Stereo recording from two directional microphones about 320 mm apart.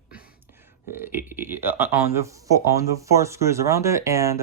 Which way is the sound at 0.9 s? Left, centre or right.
Centre.